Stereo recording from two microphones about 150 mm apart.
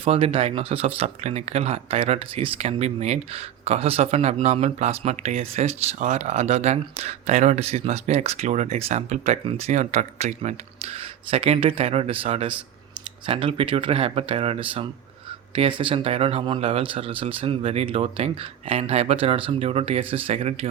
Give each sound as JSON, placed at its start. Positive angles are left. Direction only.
{"t": 0.0, "sound": "speech", "side_deg": -40}